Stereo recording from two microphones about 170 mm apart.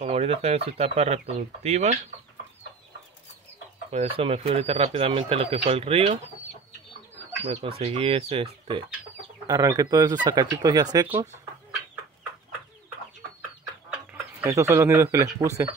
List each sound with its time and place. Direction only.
0.0 s speech: 40° right (ahead or behind)
3.9 s speech: 35° right (ahead or behind)
7.4 s speech: 40° right (ahead or behind)
9.5 s speech: 20° right (ahead or behind)
14.4 s speech: 15° right (ahead or behind)